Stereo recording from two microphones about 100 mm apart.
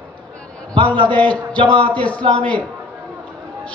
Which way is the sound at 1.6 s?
55° right (ahead or behind).